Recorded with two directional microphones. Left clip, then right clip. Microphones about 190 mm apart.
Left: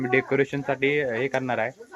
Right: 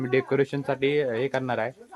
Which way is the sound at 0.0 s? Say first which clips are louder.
Left 1 dB; 10° right (ahead or behind).